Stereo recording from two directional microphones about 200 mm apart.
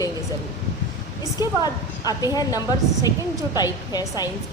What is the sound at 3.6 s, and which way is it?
Speech, 20° left (ahead or behind).